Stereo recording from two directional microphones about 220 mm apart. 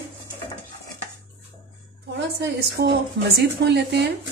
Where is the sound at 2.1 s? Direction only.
50° right (ahead or behind).